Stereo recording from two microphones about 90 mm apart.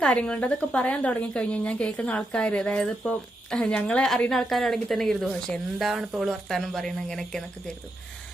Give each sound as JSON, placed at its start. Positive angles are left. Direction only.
{"t": 0.0, "sound": "a woman's voice", "side_deg": 10}